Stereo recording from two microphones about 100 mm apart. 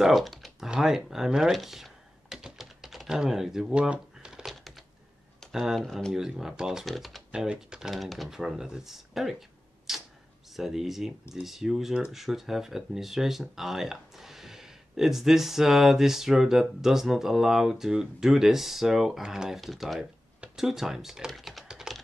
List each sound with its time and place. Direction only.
0.0 s typing: centre (ahead or behind)
0.7 s computer keyboard: 5° right (ahead or behind)
5.4 s speech: 5° right (ahead or behind)
9.9 s a sound: 5° right (ahead or behind)
10.5 s speech: 5° right (ahead or behind)
20.3 s typing: 5° right (ahead or behind)